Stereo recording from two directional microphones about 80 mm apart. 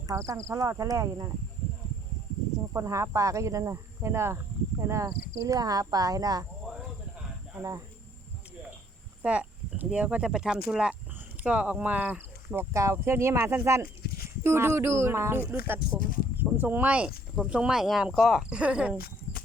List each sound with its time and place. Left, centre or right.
0.1 s speech: right
2.7 s speech: right
5.0 s speech: right
9.2 s speech: centre
12.7 s speech: right; by 18.4 s centre
18.4 s speech: centre